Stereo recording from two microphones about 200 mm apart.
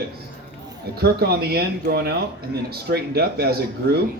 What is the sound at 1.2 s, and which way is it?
A man's voice, 50° right (ahead or behind).